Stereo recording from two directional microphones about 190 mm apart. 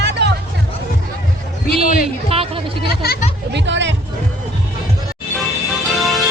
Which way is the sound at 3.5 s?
70° right (ahead or behind).